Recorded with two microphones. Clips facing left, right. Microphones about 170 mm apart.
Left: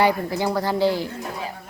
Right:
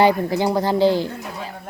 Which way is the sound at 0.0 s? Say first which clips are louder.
Right 4 dB; 25° right (ahead or behind).